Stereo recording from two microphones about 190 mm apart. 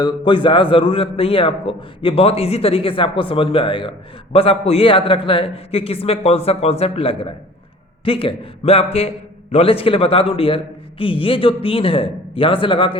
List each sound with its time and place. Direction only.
0.0 s a man's voice: 25° left (ahead or behind)